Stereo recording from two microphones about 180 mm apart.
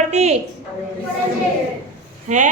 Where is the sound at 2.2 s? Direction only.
45° right (ahead or behind).